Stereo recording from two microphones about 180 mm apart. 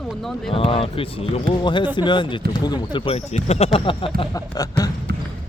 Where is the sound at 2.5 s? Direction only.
25° left (ahead or behind).